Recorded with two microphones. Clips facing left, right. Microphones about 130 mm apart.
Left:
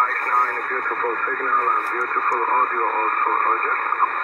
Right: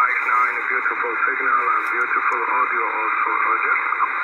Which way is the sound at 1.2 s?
25° left (ahead or behind).